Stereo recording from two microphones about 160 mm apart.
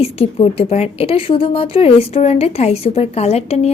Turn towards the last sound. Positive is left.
turn(degrees=40)  # may be behind; listen again after turning